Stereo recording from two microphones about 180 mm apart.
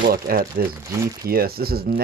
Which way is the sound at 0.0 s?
55° right (ahead or behind).